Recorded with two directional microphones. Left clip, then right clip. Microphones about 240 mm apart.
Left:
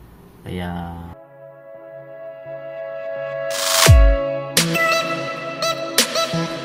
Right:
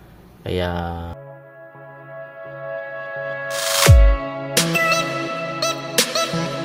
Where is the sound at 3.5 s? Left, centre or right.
Centre.